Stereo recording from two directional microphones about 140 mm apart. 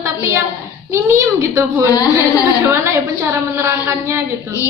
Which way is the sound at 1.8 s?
25° left (ahead or behind).